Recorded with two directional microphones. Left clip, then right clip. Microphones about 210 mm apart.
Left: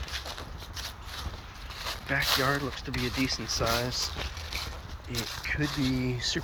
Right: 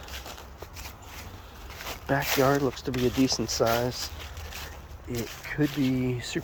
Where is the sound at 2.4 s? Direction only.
25° right (ahead or behind).